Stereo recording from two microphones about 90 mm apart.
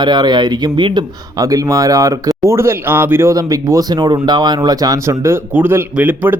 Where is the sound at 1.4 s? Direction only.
40° right (ahead or behind).